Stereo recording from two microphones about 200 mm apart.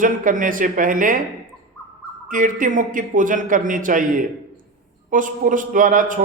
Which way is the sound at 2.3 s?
40° right (ahead or behind).